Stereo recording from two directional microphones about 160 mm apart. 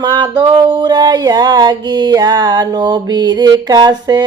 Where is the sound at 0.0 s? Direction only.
25° right (ahead or behind).